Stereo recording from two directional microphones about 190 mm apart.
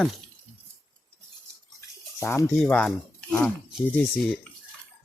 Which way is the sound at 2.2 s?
15° left (ahead or behind).